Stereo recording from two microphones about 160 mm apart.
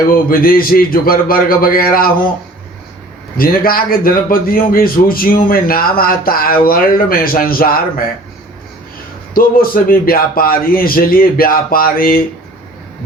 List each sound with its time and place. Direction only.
0.1 s a man's voice: 65° left (ahead or behind)
3.3 s a man's voice: 65° left (ahead or behind)
9.3 s a man's voice: 65° left (ahead or behind)